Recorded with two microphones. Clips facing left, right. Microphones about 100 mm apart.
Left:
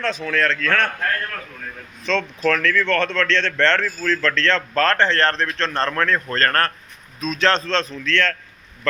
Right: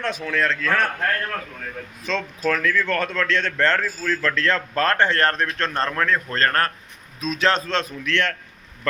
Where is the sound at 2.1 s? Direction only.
10° right (ahead or behind).